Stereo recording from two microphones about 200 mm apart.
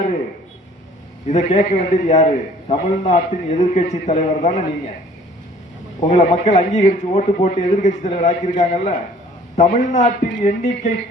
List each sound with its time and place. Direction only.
1.3 s a man's voice: 35° left (ahead or behind)
6.0 s a man's voice: 35° left (ahead or behind)